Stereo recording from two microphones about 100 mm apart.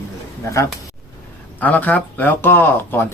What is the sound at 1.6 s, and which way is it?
Speech, 15° left (ahead or behind).